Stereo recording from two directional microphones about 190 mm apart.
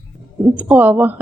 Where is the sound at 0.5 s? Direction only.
10° right (ahead or behind).